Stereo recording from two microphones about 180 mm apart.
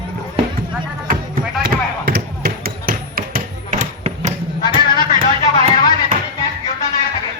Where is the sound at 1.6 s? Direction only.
60° right (ahead or behind); by 4.4 s 40° right (ahead or behind).